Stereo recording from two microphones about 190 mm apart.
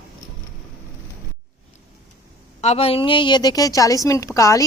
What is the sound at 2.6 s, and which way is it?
A woman's voice, 35° left (ahead or behind).